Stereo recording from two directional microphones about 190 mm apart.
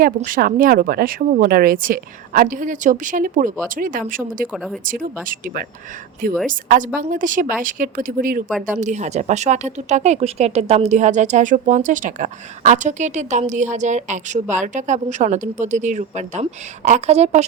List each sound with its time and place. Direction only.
0.0 s speech: 45° right (ahead or behind)
4.5 s speech: centre (ahead or behind)
4.9 s speech: 45° right (ahead or behind)
6.5 s speech: 45° right (ahead or behind)